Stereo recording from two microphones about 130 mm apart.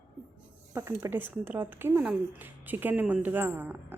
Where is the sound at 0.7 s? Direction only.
20° right (ahead or behind).